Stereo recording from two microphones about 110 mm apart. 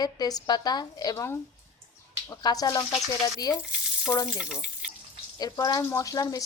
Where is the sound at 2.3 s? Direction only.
35° left (ahead or behind).